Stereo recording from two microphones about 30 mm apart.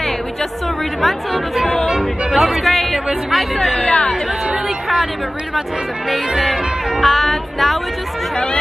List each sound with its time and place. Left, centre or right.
1.0 s music: centre
2.7 s music: centre
3.7 s speech: left
6.0 s music: centre